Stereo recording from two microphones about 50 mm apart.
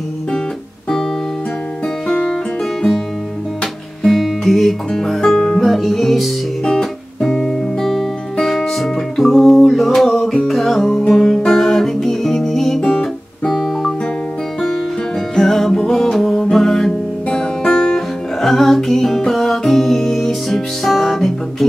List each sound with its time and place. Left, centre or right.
4.0 s music: centre
6.6 s guitar: centre
10.5 s music: centre
12.8 s guitar: centre
13.5 s guitar: centre
15.3 s music: centre